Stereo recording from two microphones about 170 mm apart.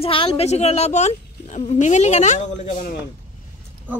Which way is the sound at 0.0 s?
30° left (ahead or behind).